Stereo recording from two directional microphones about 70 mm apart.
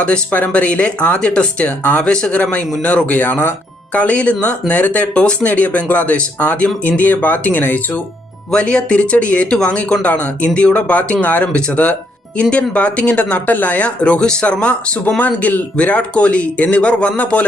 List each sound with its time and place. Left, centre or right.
0.0 s speech: centre
8.4 s speech: centre